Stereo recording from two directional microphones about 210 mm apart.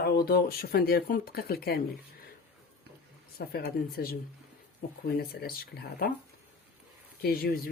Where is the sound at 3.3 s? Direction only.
45° left (ahead or behind).